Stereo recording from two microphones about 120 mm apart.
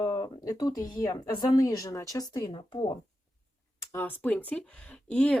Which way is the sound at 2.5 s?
40° left (ahead or behind).